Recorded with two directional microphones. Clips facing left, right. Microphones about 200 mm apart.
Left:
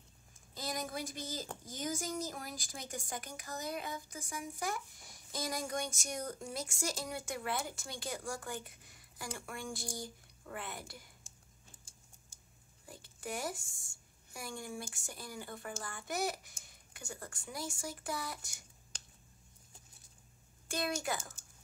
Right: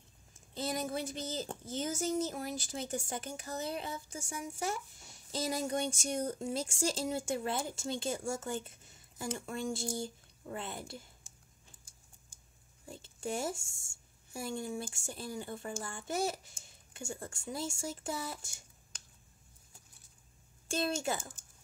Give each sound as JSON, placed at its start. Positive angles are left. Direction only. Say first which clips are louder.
{"t": 0.6, "sound": "speech", "louder": "right 4 dB", "side_deg": -25}
{"t": 12.8, "sound": "speech", "louder": "right 5 dB", "side_deg": -25}
{"t": 20.6, "sound": "speech", "louder": "right 3 dB", "side_deg": -25}